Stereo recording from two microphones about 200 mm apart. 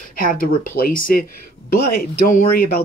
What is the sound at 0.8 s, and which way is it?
Speech, 45° left (ahead or behind).